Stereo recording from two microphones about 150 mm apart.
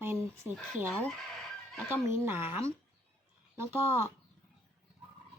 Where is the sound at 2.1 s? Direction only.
15° right (ahead or behind).